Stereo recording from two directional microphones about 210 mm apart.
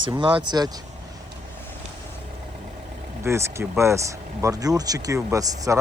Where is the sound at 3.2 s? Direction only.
10° right (ahead or behind).